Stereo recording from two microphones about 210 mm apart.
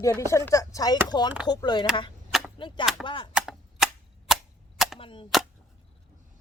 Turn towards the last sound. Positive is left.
turn(degrees=25)  # may be behind; listen again after turning